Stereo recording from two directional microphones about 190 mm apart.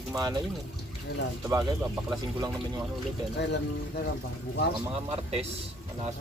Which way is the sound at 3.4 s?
65° left (ahead or behind).